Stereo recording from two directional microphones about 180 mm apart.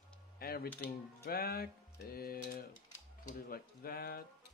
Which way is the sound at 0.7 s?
10° left (ahead or behind).